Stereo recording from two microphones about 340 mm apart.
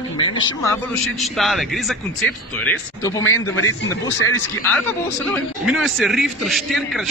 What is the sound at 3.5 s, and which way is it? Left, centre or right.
Speech, left.